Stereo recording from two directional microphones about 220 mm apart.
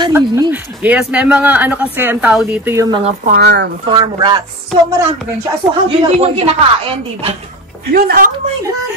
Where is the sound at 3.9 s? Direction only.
20° right (ahead or behind).